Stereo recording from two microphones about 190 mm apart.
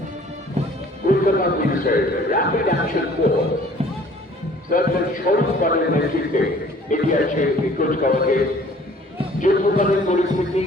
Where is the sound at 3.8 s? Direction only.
35° right (ahead or behind).